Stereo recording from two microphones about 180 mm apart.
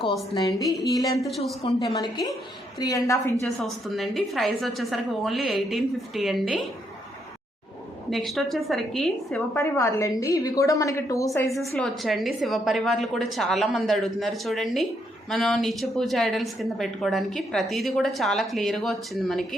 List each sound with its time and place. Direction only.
0.3 s a sound: 20° left (ahead or behind)
3.4 s a woman's voice: centre (ahead or behind)
8.1 s a woman's voice: centre (ahead or behind)
9.6 s a woman's voice: 15° left (ahead or behind)
11.5 s a woman's voice: centre (ahead or behind)